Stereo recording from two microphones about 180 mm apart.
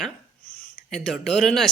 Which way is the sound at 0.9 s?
5° left (ahead or behind).